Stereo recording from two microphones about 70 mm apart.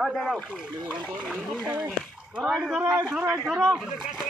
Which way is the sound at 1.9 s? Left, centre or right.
Centre.